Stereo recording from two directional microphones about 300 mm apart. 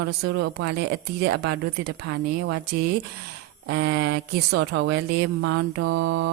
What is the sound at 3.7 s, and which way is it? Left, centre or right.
Speech, right.